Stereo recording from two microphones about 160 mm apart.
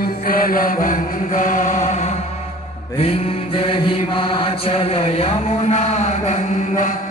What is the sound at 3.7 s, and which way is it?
Chant, 35° left (ahead or behind).